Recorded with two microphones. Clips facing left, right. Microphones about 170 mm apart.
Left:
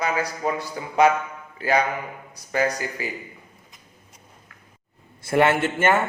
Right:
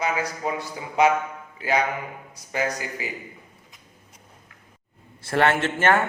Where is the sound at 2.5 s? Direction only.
15° right (ahead or behind).